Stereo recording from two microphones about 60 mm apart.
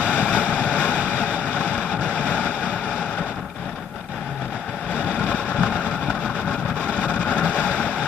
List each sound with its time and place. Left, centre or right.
0.0 s vehicle: left
4.9 s vehicle: left